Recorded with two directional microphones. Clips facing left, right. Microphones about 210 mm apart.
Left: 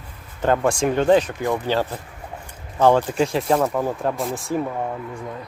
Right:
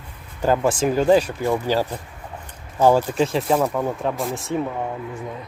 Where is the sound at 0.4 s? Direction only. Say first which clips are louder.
Even; 5° right (ahead or behind).